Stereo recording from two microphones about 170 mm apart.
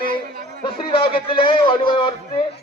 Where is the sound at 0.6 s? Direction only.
30° left (ahead or behind).